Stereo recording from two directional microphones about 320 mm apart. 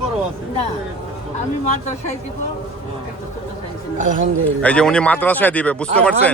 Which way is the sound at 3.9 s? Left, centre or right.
Right.